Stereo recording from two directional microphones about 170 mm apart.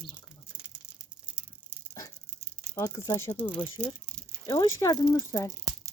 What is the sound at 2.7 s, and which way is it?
Speech, 20° left (ahead or behind).